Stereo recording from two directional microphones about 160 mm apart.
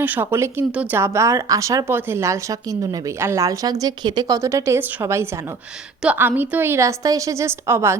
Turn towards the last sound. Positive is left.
turn(degrees=-15)  # may be behind; listen again after turning